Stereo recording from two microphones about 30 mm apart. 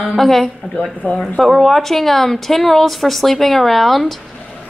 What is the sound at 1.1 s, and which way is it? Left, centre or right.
Speech, left.